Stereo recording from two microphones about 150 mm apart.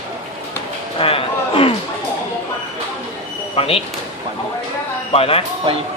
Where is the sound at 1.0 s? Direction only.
40° left (ahead or behind).